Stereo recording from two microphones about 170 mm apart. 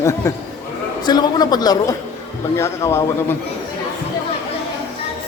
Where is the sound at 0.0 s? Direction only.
15° left (ahead or behind).